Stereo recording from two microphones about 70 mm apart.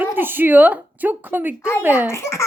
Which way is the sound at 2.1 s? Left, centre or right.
Left.